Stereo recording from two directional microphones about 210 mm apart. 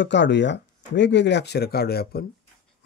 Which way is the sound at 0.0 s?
55° left (ahead or behind).